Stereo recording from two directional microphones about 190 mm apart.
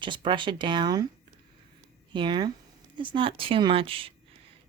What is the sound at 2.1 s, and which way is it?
Speech, 25° right (ahead or behind).